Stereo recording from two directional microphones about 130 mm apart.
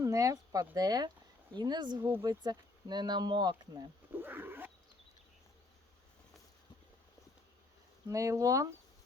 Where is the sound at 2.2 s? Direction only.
30° right (ahead or behind).